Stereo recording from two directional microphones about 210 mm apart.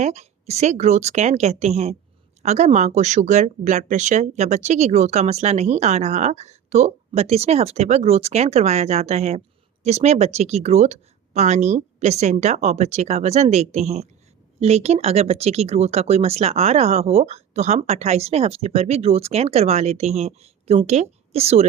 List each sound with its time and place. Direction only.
0.0 s speech: 30° right (ahead or behind)